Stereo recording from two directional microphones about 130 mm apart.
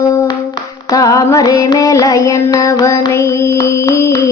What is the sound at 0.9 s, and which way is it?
Child singing, 25° left (ahead or behind).